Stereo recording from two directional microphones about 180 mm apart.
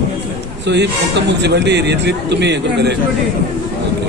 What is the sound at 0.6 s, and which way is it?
A man's voice, 70° right (ahead or behind).